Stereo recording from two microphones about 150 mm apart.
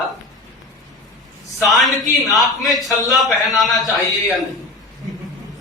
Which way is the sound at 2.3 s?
Centre (ahead or behind).